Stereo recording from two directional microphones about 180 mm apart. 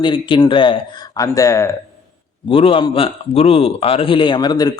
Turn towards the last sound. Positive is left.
turn(degrees=20)  # may be behind; listen again after turning